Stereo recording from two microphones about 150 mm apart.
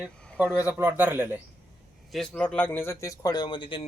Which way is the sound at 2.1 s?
5° left (ahead or behind).